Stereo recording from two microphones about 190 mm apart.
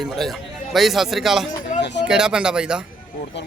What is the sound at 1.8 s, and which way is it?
Speech, 65° left (ahead or behind).